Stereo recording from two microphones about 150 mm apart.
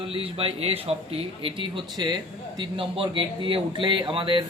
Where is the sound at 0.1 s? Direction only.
40° right (ahead or behind).